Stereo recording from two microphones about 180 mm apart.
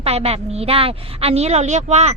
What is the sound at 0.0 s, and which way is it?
A woman's voice, 35° right (ahead or behind).